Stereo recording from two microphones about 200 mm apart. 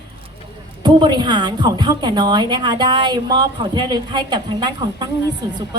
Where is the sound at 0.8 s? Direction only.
20° right (ahead or behind).